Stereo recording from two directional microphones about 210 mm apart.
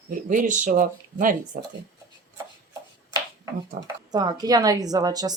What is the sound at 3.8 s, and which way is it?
A woman's voice, 20° right (ahead or behind).